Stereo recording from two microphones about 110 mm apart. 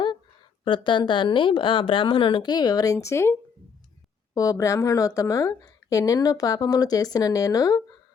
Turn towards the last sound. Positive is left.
turn(degrees=35)  # may be behind; listen again after turning